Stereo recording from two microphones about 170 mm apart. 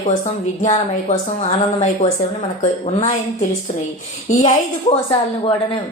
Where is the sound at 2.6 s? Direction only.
35° left (ahead or behind).